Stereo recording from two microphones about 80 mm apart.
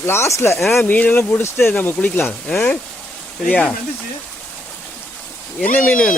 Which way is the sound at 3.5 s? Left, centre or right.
Centre.